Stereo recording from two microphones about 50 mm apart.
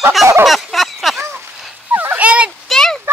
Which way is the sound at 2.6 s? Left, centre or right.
Centre.